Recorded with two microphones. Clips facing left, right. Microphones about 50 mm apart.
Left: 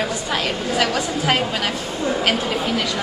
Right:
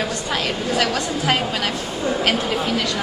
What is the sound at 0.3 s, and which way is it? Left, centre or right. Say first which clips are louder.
Speech: right 1 dB; centre.